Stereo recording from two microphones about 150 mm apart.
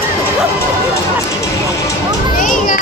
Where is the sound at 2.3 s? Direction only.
60° left (ahead or behind).